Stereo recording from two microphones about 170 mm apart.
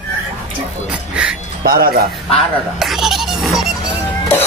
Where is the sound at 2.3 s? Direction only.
Centre (ahead or behind).